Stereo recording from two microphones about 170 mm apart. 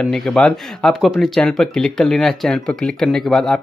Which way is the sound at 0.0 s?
Centre (ahead or behind).